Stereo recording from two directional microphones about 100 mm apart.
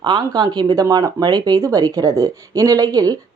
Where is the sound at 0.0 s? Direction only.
45° right (ahead or behind).